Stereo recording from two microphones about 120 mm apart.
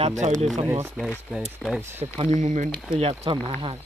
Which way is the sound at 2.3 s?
90° right.